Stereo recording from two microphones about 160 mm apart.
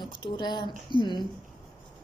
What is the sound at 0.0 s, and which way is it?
A woman's voice, 30° left (ahead or behind).